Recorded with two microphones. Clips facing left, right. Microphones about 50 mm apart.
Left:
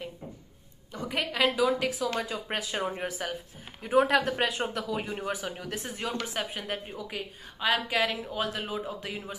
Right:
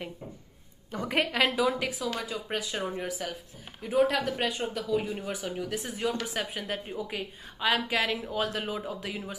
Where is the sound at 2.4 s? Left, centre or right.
Centre.